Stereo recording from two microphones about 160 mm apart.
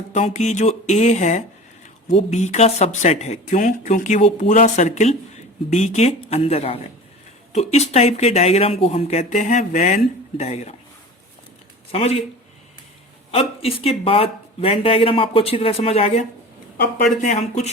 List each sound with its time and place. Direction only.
0.1 s speech: 50° left (ahead or behind)
11.9 s speech: 40° left (ahead or behind)
13.3 s speech: 35° left (ahead or behind)